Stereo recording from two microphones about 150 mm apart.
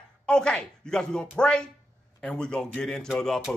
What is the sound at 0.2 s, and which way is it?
Speech, 5° left (ahead or behind).